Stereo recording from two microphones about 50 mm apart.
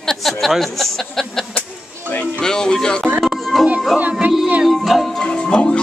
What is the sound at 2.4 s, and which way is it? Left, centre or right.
Music, centre.